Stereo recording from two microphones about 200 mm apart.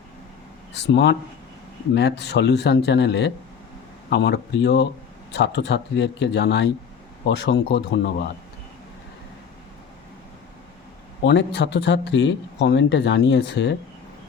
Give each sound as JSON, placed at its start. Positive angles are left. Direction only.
{"t": 0.7, "sound": "speech", "side_deg": 60}
{"t": 11.2, "sound": "speech", "side_deg": 60}